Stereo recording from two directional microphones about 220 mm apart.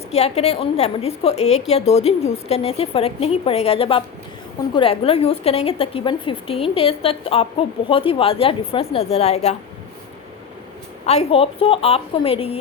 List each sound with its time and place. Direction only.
0.1 s a woman's voice: 30° left (ahead or behind)
11.0 s a woman's voice: 30° left (ahead or behind)